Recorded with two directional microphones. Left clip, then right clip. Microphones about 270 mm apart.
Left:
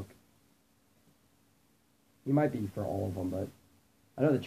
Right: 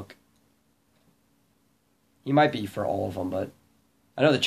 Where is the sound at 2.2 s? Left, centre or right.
Centre.